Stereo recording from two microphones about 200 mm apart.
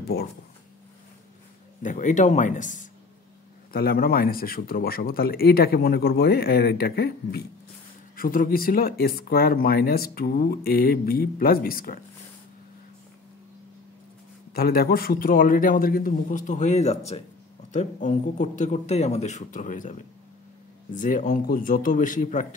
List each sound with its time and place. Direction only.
0.0 s speech: 50° left (ahead or behind)
1.8 s speech: 40° left (ahead or behind)
14.5 s speech: 50° left (ahead or behind)